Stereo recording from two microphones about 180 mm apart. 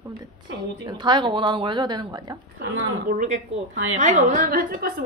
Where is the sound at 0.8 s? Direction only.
25° right (ahead or behind).